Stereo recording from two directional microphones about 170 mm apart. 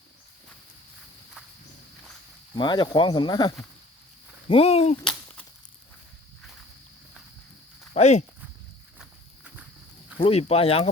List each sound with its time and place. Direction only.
2.6 s speech: 25° left (ahead or behind)
5.0 s a sound: 5° left (ahead or behind)
7.9 s speech: 40° left (ahead or behind)
9.0 s walk: 5° right (ahead or behind)
10.2 s speech: 35° left (ahead or behind)